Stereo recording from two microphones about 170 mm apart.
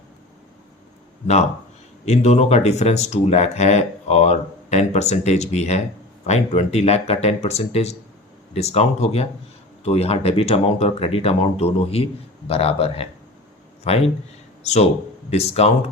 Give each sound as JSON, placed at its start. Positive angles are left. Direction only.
{"t": 2.0, "sound": "speech", "side_deg": 40}
{"t": 15.3, "sound": "speech", "side_deg": 35}